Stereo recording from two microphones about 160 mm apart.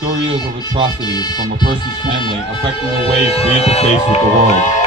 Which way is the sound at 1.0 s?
25° left (ahead or behind).